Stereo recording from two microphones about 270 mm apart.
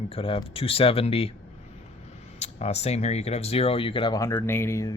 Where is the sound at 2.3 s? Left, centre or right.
Left.